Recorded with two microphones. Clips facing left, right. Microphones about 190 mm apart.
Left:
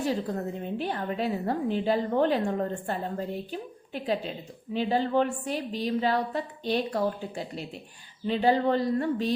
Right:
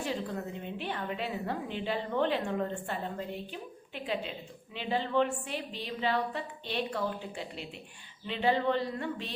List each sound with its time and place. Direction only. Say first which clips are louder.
0.0 s a woman's voice: left 6 dB; 40° left (ahead or behind)